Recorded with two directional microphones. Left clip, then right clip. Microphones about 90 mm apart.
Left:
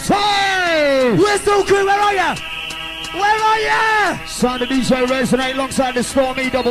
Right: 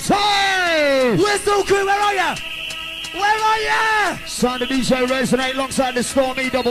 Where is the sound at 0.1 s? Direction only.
25° right (ahead or behind).